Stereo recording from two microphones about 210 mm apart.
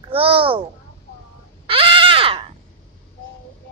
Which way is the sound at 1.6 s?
25° right (ahead or behind).